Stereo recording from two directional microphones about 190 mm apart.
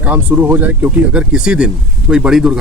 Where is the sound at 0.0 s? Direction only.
10° right (ahead or behind).